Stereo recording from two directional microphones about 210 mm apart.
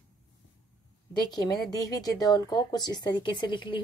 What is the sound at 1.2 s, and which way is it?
Speech, 20° left (ahead or behind).